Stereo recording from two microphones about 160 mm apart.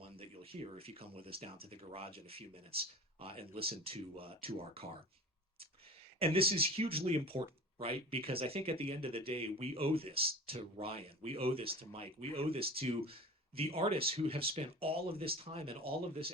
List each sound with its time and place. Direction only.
0.2 s speech: 35° right (ahead or behind)
6.1 s speech: 35° right (ahead or behind)
15.8 s speech: 75° right (ahead or behind)